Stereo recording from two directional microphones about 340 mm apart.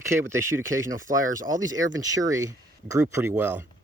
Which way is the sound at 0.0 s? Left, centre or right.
Centre.